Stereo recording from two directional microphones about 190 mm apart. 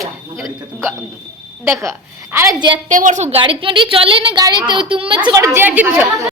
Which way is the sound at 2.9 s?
40° right (ahead or behind).